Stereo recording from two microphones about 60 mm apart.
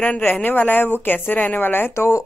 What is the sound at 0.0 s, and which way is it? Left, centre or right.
Speech, left.